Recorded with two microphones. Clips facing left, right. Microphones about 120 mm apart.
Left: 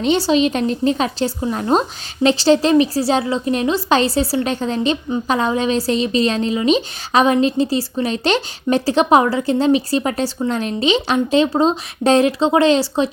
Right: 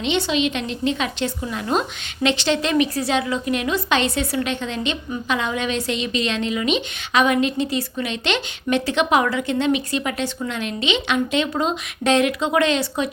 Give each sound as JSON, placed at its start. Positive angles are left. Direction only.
{"t": 0.0, "sound": "a woman's voice", "side_deg": 40}